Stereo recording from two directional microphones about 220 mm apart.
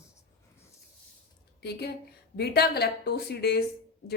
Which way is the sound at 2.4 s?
45° left (ahead or behind).